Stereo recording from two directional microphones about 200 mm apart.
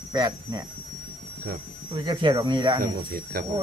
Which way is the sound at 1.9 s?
20° right (ahead or behind).